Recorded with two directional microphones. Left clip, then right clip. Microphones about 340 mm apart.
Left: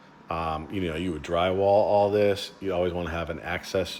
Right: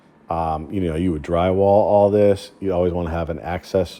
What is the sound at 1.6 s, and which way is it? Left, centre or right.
Speech, right.